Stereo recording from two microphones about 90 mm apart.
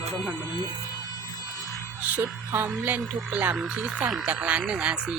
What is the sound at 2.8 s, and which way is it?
Speech, 20° right (ahead or behind).